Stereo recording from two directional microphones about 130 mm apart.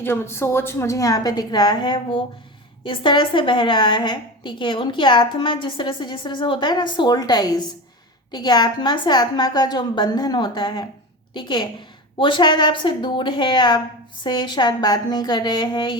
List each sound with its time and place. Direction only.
0.0 s a woman's voice: 20° left (ahead or behind); by 16.0 s 35° left (ahead or behind)